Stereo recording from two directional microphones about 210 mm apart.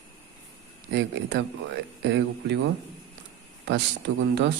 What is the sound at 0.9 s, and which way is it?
Speech, 55° right (ahead or behind).